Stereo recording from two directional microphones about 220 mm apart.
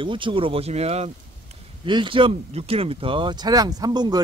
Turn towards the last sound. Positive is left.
turn(degrees=-20)  # may be behind; listen again after turning